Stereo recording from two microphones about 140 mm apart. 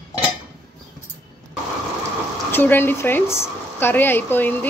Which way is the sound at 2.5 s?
15° left (ahead or behind).